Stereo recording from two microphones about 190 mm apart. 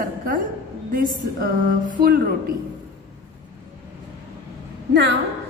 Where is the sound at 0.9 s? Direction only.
45° right (ahead or behind).